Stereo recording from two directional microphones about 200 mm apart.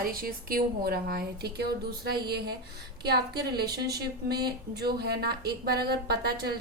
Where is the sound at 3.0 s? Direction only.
55° right (ahead or behind).